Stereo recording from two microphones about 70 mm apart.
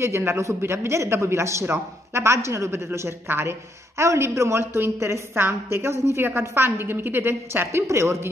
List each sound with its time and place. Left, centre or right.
0.0 s a man's voice: right
7.8 s a man's voice: right